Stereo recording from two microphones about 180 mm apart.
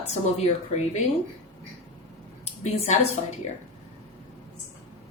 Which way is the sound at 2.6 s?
35° left (ahead or behind).